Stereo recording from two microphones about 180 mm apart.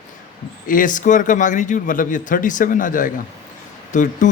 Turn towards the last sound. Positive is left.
turn(degrees=45)  # may be behind; listen again after turning